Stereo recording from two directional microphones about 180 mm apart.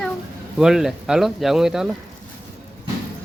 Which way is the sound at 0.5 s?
5° right (ahead or behind).